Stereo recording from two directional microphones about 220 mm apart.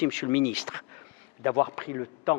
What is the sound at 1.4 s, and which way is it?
Speech, 20° left (ahead or behind).